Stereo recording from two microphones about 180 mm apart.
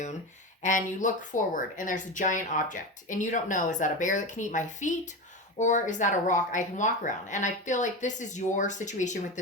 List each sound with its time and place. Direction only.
0.6 s speech: 45° left (ahead or behind)